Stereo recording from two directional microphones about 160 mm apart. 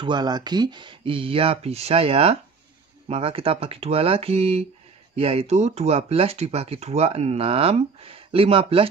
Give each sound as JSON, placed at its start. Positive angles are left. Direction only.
{"t": 0.0, "sound": "speech", "side_deg": -25}